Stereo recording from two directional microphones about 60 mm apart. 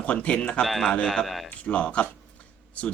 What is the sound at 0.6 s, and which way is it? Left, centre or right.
Speech, centre.